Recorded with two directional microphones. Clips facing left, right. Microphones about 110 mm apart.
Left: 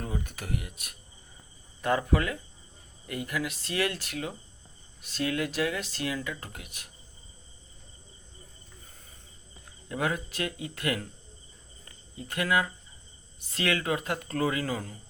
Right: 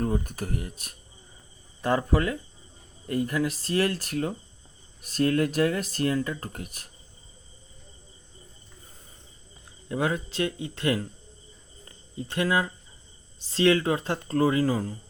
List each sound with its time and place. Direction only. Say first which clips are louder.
0.0 s speech: right 8 dB; 45° right (ahead or behind)
9.9 s speech: right 3 dB; 25° right (ahead or behind)